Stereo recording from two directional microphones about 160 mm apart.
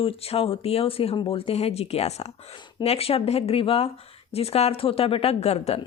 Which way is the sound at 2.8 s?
40° left (ahead or behind).